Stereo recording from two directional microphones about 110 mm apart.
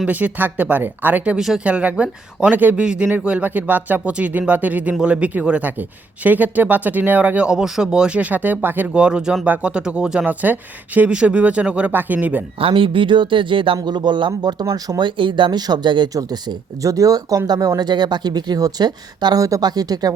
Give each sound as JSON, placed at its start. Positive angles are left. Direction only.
{"t": 0.0, "sound": "speech", "side_deg": -15}
{"t": 12.5, "sound": "speech", "side_deg": -55}